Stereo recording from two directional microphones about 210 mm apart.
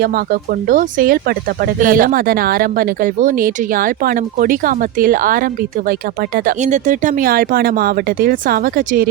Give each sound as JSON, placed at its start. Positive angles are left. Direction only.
{"t": 0.7, "sound": "speech", "side_deg": -40}